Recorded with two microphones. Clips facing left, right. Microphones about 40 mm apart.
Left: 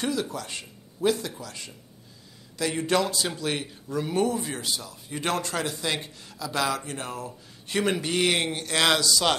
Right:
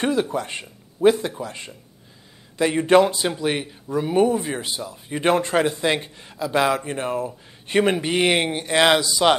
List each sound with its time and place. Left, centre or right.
0.0 s speech: right